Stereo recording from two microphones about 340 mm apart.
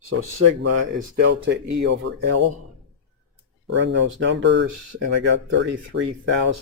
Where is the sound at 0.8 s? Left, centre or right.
Right.